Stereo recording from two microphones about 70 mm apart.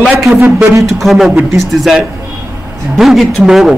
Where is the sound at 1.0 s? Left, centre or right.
Centre.